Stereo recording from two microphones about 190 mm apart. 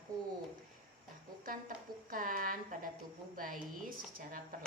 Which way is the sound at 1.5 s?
45° right (ahead or behind).